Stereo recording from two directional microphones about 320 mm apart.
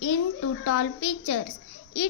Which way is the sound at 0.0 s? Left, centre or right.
Left.